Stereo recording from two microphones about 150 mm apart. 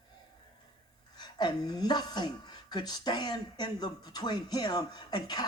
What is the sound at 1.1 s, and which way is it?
Speech, 30° left (ahead or behind).